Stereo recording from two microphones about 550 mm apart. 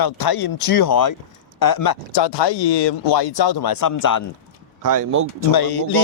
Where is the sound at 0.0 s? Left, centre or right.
Left.